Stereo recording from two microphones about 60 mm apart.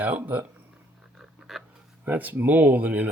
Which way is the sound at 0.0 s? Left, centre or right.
Right.